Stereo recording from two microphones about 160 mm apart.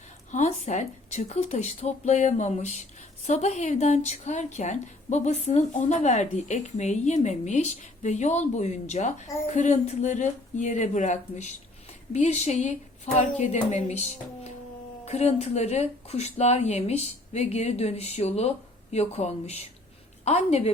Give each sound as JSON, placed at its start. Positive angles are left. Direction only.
{"t": 0.3, "sound": "speech", "side_deg": 45}
{"t": 15.0, "sound": "a woman's voice", "side_deg": 40}